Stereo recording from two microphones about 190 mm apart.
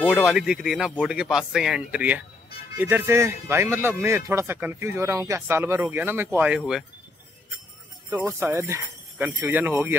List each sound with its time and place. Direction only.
0.1 s speech: 5° right (ahead or behind)
8.2 s speech: 10° right (ahead or behind)